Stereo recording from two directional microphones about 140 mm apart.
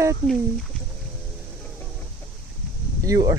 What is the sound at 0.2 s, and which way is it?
Speech, 35° right (ahead or behind).